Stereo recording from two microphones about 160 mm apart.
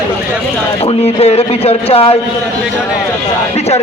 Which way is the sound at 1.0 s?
40° left (ahead or behind).